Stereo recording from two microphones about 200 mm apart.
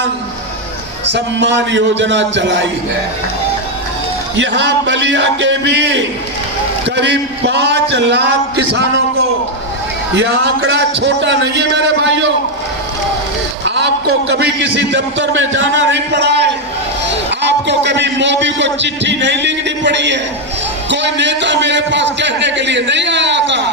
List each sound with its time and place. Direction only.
1.1 s a man's voice: 60° right (ahead or behind)
4.4 s a man's voice: 65° right (ahead or behind)
10.2 s a man's voice: 65° right (ahead or behind)
13.7 s a man's voice: 60° right (ahead or behind)